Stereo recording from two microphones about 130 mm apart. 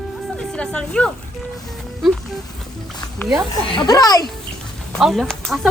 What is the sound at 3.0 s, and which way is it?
Wild animals, 30° left (ahead or behind).